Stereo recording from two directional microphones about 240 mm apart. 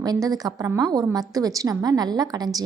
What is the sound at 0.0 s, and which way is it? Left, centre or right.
A woman's voice, centre.